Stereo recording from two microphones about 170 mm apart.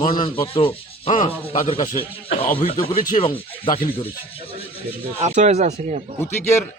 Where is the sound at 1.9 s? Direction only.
60° left (ahead or behind).